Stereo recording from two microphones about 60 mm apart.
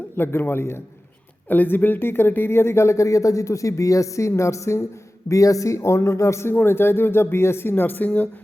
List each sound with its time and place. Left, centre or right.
0.2 s speech: left
5.3 s a man's voice: left
6.5 s speech: left